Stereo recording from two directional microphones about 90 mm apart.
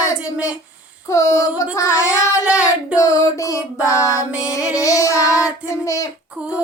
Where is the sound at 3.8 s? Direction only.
35° left (ahead or behind).